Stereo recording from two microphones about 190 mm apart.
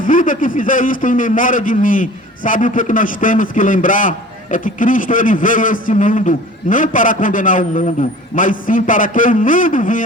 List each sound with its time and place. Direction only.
0.0 s a man's voice: 45° left (ahead or behind)